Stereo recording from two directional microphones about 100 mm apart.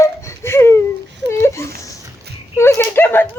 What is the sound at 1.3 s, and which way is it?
Whimper, 25° left (ahead or behind).